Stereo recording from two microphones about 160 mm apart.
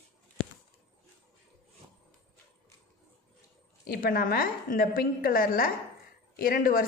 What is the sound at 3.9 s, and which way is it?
A woman's voice, 65° left (ahead or behind).